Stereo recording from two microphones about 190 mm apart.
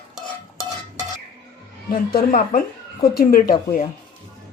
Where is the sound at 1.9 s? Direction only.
50° left (ahead or behind).